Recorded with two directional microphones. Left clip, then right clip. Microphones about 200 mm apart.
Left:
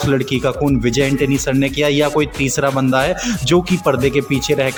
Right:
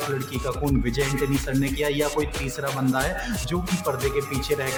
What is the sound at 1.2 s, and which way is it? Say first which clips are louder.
Speech: left 9 dB; 35° left (ahead or behind).